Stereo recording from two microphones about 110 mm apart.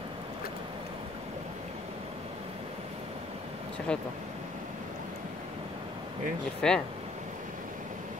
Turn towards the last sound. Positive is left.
turn(degrees=5)  # may be behind; listen again after turning